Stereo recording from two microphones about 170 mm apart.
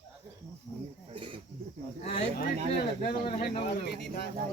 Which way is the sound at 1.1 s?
30° right (ahead or behind).